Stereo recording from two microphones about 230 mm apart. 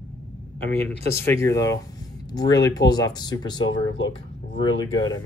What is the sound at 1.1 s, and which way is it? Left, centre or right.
Speech, centre.